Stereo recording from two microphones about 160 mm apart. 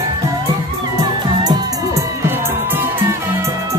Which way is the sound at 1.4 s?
20° right (ahead or behind).